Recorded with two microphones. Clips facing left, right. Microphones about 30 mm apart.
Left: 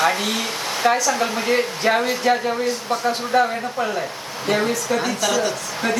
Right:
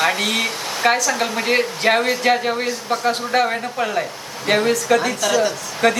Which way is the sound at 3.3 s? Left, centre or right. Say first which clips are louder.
Left 1 dB; right.